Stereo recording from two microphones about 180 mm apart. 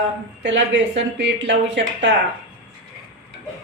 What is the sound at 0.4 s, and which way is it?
A woman's voice, 90° right.